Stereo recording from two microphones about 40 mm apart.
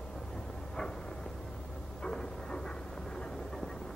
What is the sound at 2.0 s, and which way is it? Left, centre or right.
Train, centre.